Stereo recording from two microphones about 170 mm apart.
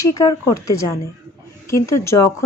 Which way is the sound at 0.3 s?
20° left (ahead or behind).